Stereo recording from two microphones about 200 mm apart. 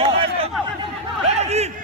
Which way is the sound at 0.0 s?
30° right (ahead or behind).